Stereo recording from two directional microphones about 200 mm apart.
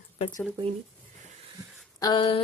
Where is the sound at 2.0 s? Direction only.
20° left (ahead or behind).